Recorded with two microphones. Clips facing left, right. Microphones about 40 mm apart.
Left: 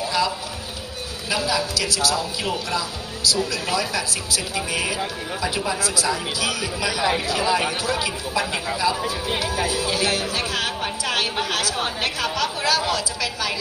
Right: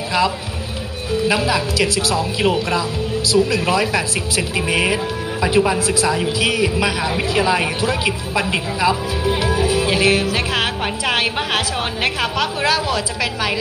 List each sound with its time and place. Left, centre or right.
1.3 s a woman's voice: right